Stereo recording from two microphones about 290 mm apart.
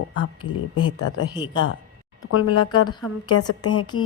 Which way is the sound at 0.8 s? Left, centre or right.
Left.